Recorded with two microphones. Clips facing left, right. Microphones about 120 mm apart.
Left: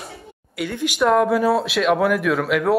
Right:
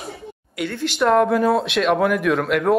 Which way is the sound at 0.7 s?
10° left (ahead or behind).